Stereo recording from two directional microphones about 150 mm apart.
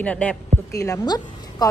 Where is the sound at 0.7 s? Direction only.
20° left (ahead or behind).